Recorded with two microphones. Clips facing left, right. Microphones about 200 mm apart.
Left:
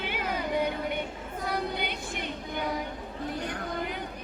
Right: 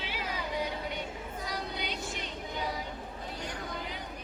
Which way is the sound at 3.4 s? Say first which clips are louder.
Left 5 dB; 55° left (ahead or behind).